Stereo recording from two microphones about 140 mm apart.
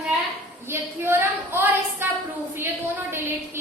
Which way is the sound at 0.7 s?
15° right (ahead or behind).